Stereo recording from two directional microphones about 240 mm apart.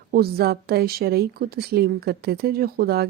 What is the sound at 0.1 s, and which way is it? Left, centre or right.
Speech, right.